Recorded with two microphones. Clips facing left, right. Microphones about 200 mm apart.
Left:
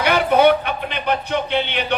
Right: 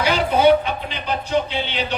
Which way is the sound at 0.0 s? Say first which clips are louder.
Left 2 dB; 60° left (ahead or behind).